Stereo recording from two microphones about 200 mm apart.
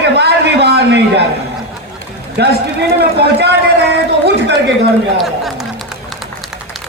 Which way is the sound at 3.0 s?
55° right (ahead or behind).